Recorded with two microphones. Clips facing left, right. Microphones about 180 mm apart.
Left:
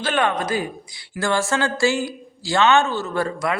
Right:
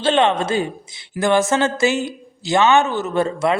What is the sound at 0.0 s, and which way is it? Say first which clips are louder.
A woman's voice: right 5 dB; 25° right (ahead or behind).